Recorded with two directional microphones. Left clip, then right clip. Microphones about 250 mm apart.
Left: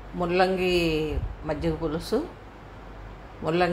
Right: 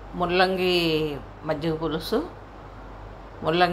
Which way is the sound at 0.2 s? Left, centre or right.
Centre.